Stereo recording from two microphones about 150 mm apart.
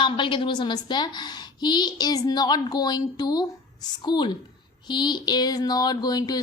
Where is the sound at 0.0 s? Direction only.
35° left (ahead or behind).